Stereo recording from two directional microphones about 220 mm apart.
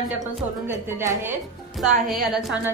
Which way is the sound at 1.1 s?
10° right (ahead or behind).